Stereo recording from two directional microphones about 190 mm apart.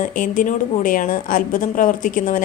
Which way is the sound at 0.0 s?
45° left (ahead or behind).